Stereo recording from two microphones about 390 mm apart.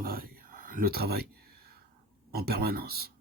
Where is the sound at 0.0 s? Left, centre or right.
Right.